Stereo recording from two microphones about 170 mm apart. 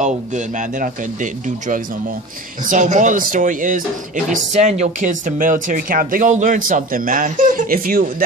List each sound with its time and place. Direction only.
0.7 s speech: 50° right (ahead or behind)